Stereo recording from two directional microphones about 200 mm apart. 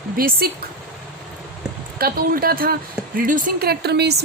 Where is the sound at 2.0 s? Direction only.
45° right (ahead or behind).